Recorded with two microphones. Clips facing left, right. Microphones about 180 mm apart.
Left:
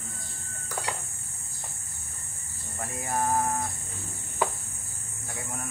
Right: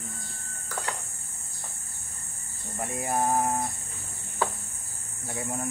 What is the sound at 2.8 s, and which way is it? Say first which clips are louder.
Speech: right 2 dB; 20° right (ahead or behind).